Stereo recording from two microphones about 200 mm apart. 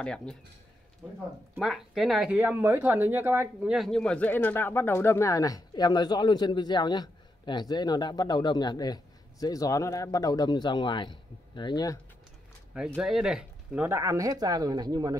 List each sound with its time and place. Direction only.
0.0 s speech: 5° left (ahead or behind)
12.7 s speech: 5° right (ahead or behind); by 15.1 s 20° right (ahead or behind)